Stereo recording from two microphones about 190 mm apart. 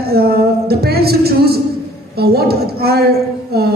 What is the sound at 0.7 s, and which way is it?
A woman's voice, 55° right (ahead or behind).